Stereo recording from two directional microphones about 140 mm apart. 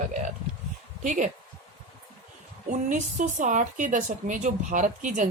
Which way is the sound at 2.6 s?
60° right (ahead or behind).